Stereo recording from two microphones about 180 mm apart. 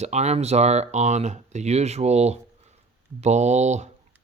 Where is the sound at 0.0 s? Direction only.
40° right (ahead or behind).